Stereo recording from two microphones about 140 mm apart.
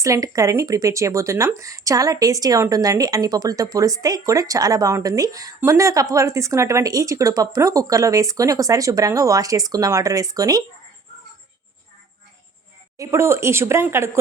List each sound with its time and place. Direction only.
0.0 s speech: 25° right (ahead or behind)
13.0 s speech: 20° right (ahead or behind)